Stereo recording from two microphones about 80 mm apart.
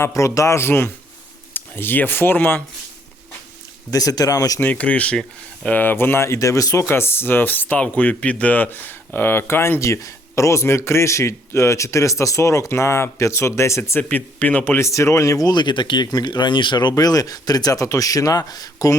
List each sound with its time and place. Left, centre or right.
0.0 s speech: left
3.9 s speech: left
4.6 s speech: centre; by 6.8 s left
6.8 s speech: left
14.1 s speech: left
14.8 s speech: left
15.4 s speech: left
16.9 s speech: left